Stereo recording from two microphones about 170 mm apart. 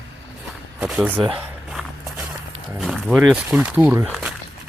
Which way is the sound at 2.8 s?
Centre (ahead or behind).